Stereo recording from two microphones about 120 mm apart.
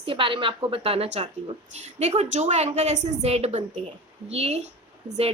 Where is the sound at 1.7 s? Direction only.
70° right (ahead or behind).